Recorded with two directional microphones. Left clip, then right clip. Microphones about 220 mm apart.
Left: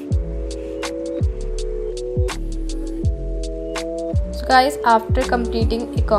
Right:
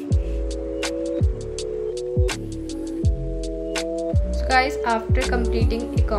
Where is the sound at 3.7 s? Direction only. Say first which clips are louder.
Even; centre (ahead or behind).